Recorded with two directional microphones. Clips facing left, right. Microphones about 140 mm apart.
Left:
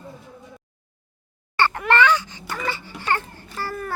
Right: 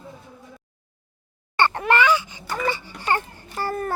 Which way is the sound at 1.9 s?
10° right (ahead or behind).